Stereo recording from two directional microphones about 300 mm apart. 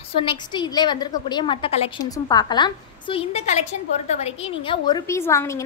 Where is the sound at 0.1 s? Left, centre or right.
Centre.